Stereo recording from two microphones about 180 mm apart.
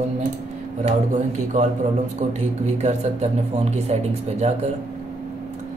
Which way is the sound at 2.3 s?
40° right (ahead or behind).